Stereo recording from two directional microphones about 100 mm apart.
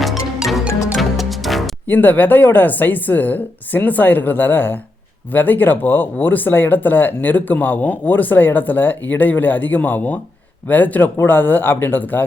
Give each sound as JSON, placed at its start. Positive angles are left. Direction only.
{"t": 0.0, "sound": "music", "side_deg": 0}
{"t": 1.9, "sound": "a woman's voice", "side_deg": 20}